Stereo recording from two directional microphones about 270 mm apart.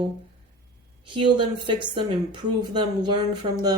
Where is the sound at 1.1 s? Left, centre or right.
Centre.